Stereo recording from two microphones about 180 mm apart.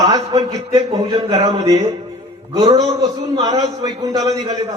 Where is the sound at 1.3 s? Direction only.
35° right (ahead or behind).